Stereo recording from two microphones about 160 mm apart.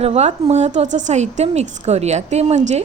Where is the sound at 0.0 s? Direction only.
40° right (ahead or behind).